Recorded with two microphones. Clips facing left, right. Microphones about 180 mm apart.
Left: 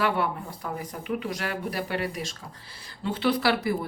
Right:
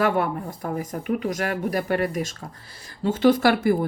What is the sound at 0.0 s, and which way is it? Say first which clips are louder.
Speech: right 4 dB; 45° right (ahead or behind).